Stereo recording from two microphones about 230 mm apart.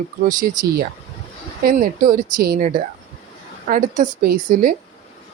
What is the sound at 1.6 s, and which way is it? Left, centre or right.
Speech, right.